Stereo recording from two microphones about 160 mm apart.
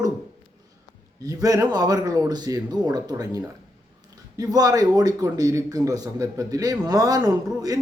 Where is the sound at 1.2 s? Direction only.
20° right (ahead or behind).